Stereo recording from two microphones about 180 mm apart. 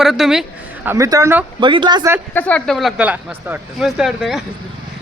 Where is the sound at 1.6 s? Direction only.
25° right (ahead or behind).